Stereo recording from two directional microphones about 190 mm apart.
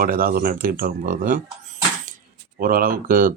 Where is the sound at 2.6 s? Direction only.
50° right (ahead or behind).